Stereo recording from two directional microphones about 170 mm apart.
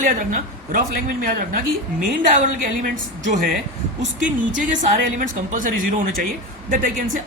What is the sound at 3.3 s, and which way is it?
Speech, 50° right (ahead or behind).